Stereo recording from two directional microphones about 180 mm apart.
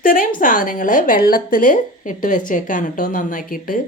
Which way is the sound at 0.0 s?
50° left (ahead or behind).